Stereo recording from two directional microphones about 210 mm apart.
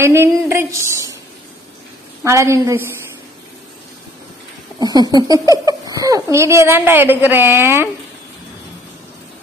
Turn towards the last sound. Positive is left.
turn(degrees=-10)  # may be behind; listen again after turning